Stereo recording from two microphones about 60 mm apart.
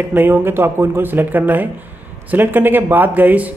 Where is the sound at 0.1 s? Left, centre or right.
Right.